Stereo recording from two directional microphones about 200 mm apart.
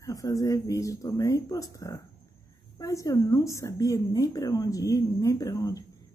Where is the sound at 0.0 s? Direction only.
15° left (ahead or behind).